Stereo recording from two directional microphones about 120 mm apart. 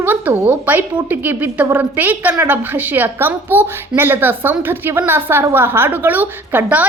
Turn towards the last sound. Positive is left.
turn(degrees=-15)  # may be behind; listen again after turning